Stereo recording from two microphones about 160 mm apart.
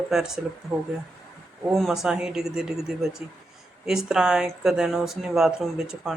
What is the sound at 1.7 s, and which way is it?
Speech, centre (ahead or behind).